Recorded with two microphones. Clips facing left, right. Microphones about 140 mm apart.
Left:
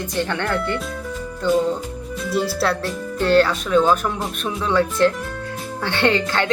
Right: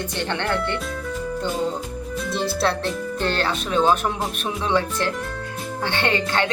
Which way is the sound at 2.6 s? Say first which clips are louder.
Left 1 dB; 25° right (ahead or behind).